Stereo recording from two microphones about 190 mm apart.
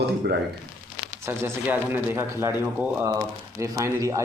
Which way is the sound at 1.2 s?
10° right (ahead or behind).